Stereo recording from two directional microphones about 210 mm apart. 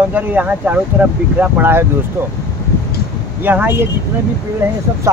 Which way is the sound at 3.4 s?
10° right (ahead or behind).